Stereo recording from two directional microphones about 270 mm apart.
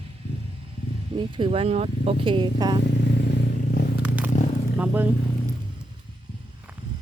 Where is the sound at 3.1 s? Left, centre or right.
Left.